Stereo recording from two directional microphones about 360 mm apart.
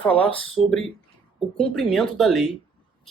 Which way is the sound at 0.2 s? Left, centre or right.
Centre.